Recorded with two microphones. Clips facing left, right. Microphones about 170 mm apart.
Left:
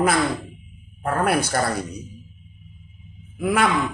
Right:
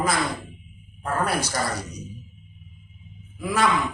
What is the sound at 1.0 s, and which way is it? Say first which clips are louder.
Speech: left 4 dB; 60° left (ahead or behind).